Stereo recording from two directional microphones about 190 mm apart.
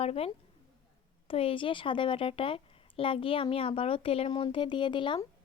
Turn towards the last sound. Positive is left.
turn(degrees=25)  # may be behind; listen again after turning